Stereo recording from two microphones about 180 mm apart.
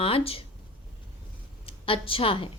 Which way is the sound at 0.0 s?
30° left (ahead or behind).